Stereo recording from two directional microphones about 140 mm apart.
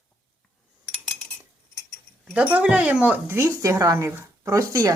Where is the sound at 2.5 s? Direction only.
10° right (ahead or behind).